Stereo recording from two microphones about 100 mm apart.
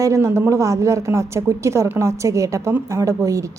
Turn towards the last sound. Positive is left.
turn(degrees=-30)  # may be behind; listen again after turning